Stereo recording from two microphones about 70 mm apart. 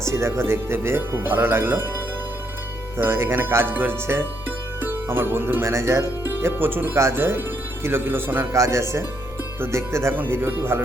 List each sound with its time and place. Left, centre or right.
0.0 s speech: right
3.0 s speech: right
8.5 s speech: right